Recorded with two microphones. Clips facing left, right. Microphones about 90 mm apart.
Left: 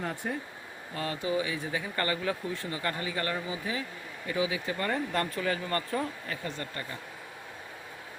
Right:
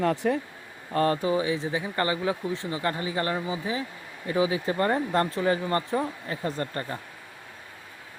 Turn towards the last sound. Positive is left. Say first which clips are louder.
# right 7 dB
turn(degrees=-40)  # may be behind; listen again after turning